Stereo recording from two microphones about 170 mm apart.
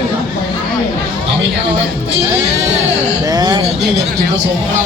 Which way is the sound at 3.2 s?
25° right (ahead or behind).